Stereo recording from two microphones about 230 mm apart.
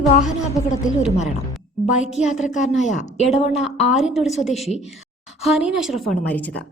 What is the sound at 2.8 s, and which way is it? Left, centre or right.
Speech, left.